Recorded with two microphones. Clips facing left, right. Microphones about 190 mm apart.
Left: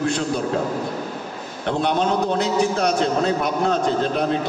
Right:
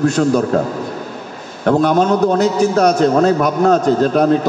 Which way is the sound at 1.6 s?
45° right (ahead or behind).